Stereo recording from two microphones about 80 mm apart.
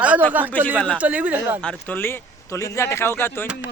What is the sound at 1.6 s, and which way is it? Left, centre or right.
Speech, centre.